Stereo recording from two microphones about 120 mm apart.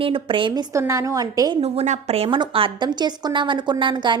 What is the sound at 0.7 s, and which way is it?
Speech, 25° right (ahead or behind).